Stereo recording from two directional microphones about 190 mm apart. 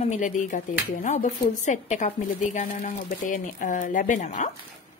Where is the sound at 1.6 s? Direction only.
40° left (ahead or behind).